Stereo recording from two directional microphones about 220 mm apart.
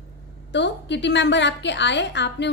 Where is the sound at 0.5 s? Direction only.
50° left (ahead or behind).